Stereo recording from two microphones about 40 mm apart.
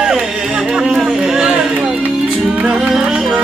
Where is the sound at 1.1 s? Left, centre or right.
Centre.